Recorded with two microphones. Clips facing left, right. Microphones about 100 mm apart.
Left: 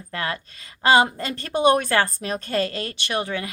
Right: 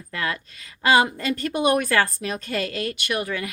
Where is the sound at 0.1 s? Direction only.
30° left (ahead or behind).